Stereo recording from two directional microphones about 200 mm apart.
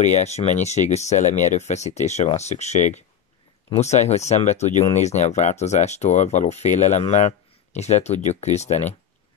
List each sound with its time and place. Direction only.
0.0 s speech: 35° left (ahead or behind)